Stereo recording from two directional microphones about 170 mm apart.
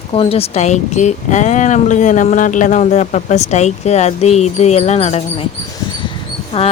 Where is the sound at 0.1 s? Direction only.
35° left (ahead or behind).